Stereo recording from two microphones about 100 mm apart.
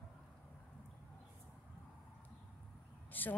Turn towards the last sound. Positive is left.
turn(degrees=20)  # may be behind; listen again after turning